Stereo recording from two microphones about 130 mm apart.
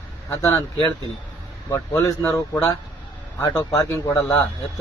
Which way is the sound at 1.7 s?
25° left (ahead or behind).